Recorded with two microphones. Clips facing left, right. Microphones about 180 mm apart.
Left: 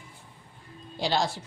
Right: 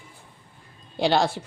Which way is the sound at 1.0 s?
60° right (ahead or behind).